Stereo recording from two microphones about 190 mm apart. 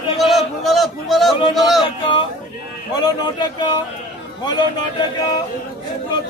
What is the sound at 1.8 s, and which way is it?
Speech, 25° left (ahead or behind).